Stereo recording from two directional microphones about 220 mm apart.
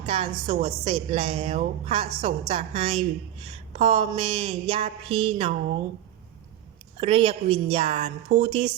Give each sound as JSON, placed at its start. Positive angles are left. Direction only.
{"t": 0.0, "sound": "a woman's voice", "side_deg": -25}
{"t": 7.0, "sound": "a woman's voice", "side_deg": -25}